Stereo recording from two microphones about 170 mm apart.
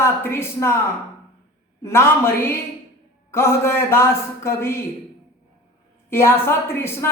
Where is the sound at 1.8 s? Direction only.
15° left (ahead or behind).